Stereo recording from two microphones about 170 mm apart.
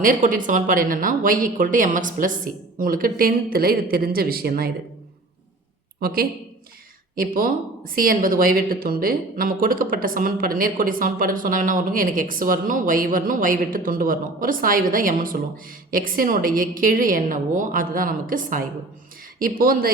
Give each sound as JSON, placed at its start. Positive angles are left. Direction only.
{"t": 0.0, "sound": "speech", "side_deg": -50}
{"t": 6.0, "sound": "speech", "side_deg": -65}